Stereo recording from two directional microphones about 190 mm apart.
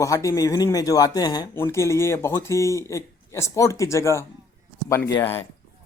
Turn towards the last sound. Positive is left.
turn(degrees=15)  # may be behind; listen again after turning